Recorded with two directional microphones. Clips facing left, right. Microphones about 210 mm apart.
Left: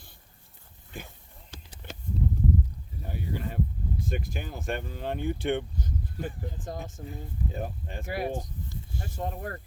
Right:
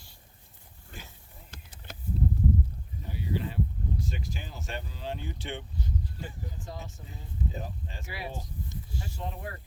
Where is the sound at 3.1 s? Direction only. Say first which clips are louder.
Right 1 dB; 50° left (ahead or behind).